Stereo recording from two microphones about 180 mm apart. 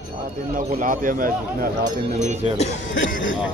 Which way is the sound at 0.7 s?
50° right (ahead or behind).